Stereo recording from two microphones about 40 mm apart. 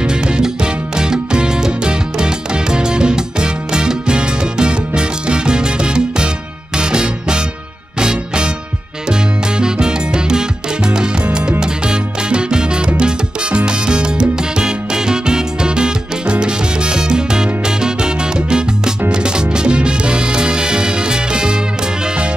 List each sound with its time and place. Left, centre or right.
0.0 s music: right
9.6 s salsa music: centre
11.6 s salsa music: right
19.0 s music: right